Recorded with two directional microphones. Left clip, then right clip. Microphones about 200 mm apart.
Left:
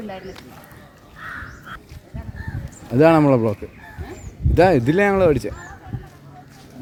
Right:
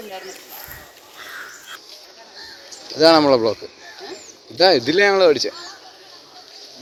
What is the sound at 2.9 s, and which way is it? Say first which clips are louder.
Speech: right 1 dB; centre (ahead or behind).